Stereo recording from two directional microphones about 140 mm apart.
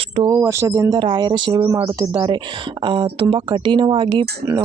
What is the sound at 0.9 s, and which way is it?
Speech, 35° right (ahead or behind).